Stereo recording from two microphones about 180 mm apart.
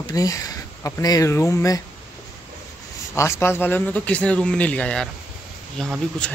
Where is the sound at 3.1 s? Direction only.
15° left (ahead or behind).